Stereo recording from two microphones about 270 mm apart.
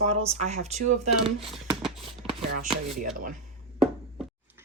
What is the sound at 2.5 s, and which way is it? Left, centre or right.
Speech, right.